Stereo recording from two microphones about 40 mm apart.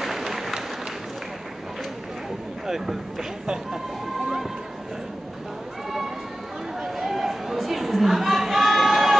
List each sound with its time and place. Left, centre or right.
0.0 s applause: centre
2.6 s speech: centre
6.8 s chatter: centre